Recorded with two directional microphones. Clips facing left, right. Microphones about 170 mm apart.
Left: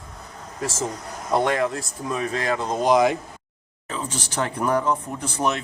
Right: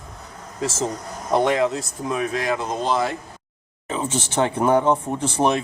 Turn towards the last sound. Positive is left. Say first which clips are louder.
# right 5 dB
turn(degrees=-30)  # may be behind; listen again after turning